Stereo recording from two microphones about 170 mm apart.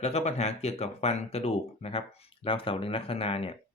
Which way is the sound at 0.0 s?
40° left (ahead or behind).